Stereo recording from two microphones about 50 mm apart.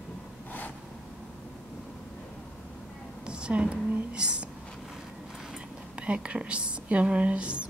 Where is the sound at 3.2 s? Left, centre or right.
Centre.